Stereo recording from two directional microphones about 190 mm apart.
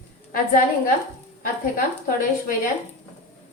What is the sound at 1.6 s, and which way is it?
Speech, 50° left (ahead or behind).